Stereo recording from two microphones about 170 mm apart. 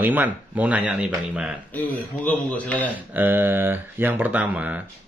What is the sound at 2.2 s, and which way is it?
Speech, 10° left (ahead or behind).